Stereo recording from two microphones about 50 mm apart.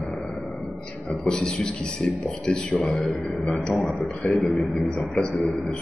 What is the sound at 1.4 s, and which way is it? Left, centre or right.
A man's voice, centre.